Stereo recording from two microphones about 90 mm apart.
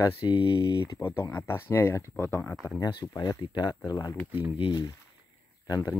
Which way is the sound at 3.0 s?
45° left (ahead or behind).